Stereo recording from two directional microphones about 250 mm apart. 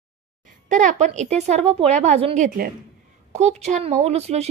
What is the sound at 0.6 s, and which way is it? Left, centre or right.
A woman's voice, right.